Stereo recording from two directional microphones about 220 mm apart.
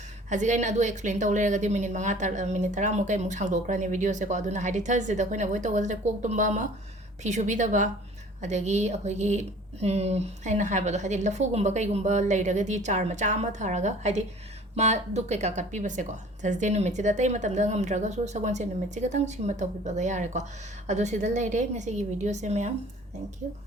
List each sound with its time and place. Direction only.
0.3 s a woman's voice: 35° right (ahead or behind)